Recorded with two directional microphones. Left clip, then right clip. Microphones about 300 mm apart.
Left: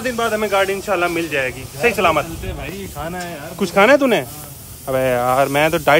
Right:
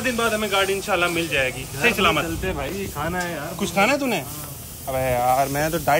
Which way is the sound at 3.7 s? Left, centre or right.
Left.